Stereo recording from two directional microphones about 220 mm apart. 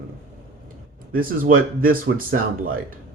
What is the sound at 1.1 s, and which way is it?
Speech, 40° right (ahead or behind).